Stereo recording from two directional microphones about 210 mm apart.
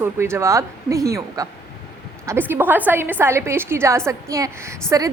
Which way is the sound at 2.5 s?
10° right (ahead or behind).